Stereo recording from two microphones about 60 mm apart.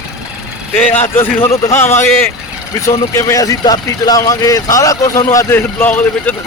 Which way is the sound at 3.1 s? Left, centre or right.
Left.